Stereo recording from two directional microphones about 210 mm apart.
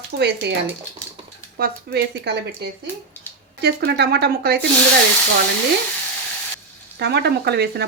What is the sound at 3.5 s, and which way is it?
Speech, 50° right (ahead or behind).